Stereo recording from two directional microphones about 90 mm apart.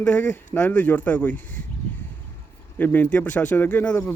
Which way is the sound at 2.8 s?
20° left (ahead or behind).